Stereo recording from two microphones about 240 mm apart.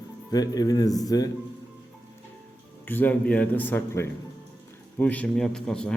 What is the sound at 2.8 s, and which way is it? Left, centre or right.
A man's voice, centre.